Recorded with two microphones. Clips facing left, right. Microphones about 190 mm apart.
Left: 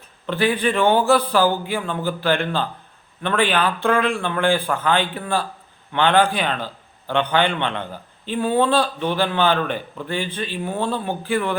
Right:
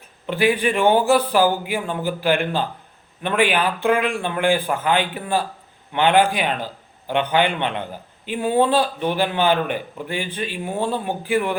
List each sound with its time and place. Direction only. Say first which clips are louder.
0.3 s a man's voice: right 1 dB; 10° right (ahead or behind)